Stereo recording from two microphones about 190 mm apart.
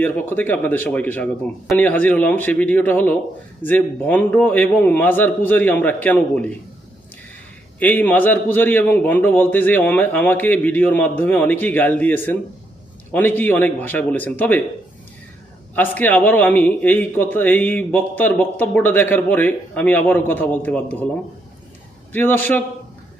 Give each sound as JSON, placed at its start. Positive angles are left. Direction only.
{"t": 0.0, "sound": "a man's voice", "side_deg": 10}
{"t": 7.8, "sound": "a man's voice", "side_deg": 10}
{"t": 15.7, "sound": "a man's voice", "side_deg": 10}
{"t": 22.1, "sound": "a man's voice", "side_deg": 10}